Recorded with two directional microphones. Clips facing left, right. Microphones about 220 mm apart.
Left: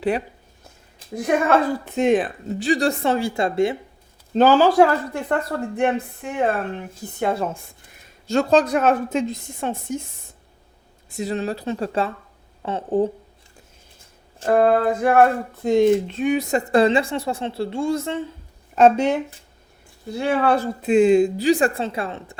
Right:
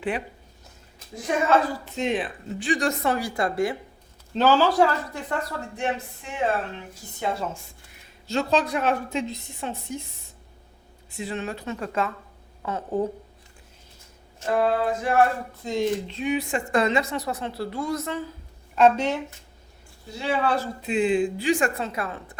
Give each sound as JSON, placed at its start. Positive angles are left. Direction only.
{"t": 1.1, "sound": "speech", "side_deg": 55}
{"t": 4.4, "sound": "a woman's voice", "side_deg": 50}
{"t": 11.1, "sound": "speech", "side_deg": 40}
{"t": 14.4, "sound": "speech", "side_deg": 55}
{"t": 18.8, "sound": "a woman's voice", "side_deg": 45}
{"t": 20.1, "sound": "speech", "side_deg": 55}